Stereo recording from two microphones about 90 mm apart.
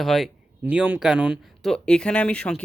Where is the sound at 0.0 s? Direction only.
Centre (ahead or behind).